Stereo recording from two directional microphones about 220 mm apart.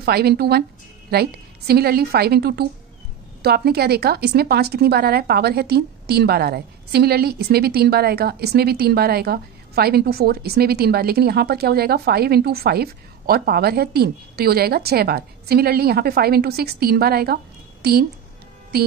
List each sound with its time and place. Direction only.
0.0 s a woman's voice: 45° right (ahead or behind)